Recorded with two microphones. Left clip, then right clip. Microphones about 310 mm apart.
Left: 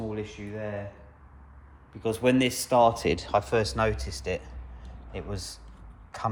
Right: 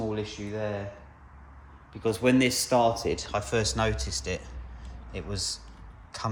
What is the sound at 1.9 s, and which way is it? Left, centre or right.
Speech, centre.